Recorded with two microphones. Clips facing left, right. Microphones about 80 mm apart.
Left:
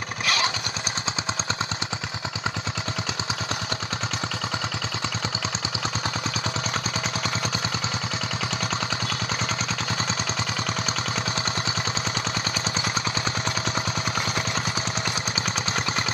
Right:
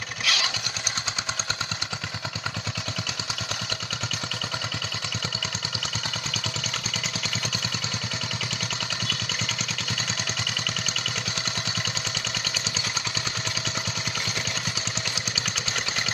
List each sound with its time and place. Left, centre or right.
0.3 s motorcycle: left